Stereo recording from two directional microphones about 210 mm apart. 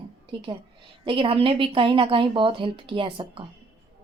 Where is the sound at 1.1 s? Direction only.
25° right (ahead or behind).